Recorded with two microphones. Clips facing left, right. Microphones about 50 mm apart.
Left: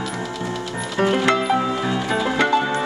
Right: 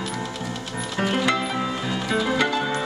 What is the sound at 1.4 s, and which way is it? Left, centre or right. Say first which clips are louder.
Music: left 6 dB; centre.